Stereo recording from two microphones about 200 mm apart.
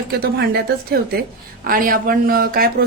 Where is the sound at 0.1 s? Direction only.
55° right (ahead or behind).